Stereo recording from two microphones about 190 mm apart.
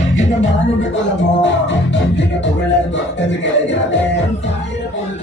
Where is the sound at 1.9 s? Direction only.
70° left (ahead or behind).